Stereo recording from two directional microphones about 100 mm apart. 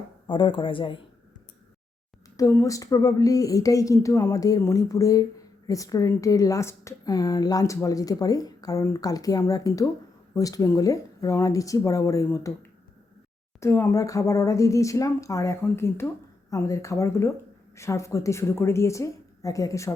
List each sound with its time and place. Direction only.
0.3 s speech: 55° left (ahead or behind)
2.3 s speech: 30° left (ahead or behind)
13.6 s a woman's voice: 25° left (ahead or behind)